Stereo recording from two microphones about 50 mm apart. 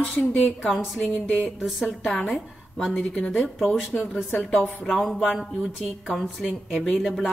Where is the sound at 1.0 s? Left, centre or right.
Left.